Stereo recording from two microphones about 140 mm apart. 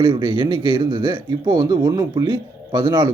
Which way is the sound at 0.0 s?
30° right (ahead or behind).